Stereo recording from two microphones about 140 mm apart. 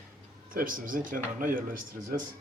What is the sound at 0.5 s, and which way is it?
Speech, 80° right.